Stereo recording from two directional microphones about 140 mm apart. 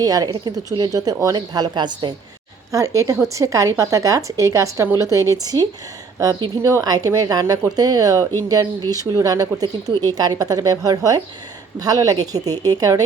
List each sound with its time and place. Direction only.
0.0 s speech: 25° right (ahead or behind)